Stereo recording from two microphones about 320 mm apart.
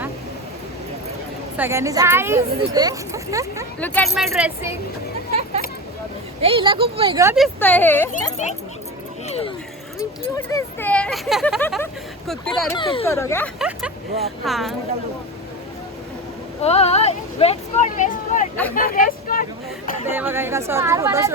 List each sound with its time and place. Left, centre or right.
1.5 s speech: centre
3.8 s speech: centre
5.3 s a sound: centre
6.4 s speech: centre
8.1 s speech: left
9.2 s a sound: centre
10.0 s speech: centre
12.7 s speech: centre
16.6 s speech: centre
20.1 s speech: centre